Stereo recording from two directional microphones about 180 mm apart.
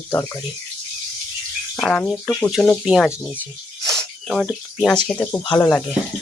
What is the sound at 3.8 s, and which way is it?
Cricket, 20° right (ahead or behind).